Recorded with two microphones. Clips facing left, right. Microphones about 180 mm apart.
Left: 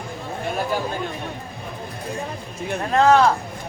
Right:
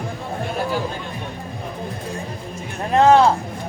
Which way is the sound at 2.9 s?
20° right (ahead or behind).